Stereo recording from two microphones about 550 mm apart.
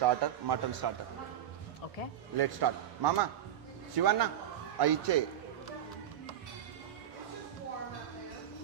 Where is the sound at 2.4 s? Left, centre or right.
Right.